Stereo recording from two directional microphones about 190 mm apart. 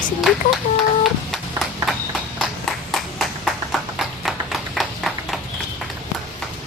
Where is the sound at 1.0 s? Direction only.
Centre (ahead or behind).